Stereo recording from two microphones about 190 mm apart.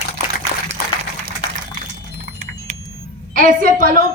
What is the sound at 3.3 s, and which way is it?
Speech, 45° right (ahead or behind).